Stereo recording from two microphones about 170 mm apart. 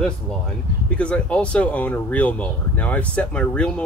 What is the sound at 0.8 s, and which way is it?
Speech, 5° left (ahead or behind).